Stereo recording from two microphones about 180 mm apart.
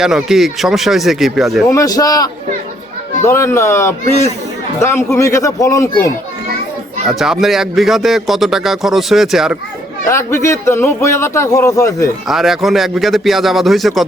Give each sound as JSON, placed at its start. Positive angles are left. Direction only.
{"t": 0.0, "sound": "a man's voice", "side_deg": -5}
{"t": 1.7, "sound": "a man's voice", "side_deg": 20}
{"t": 7.1, "sound": "a man's voice", "side_deg": 0}
{"t": 10.1, "sound": "a man's voice", "side_deg": 15}
{"t": 12.3, "sound": "a man's voice", "side_deg": 0}